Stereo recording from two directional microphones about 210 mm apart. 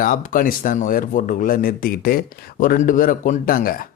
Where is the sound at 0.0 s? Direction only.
40° left (ahead or behind).